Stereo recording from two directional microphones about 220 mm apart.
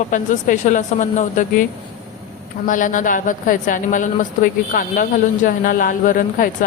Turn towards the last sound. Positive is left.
turn(degrees=40)  # may be behind; listen again after turning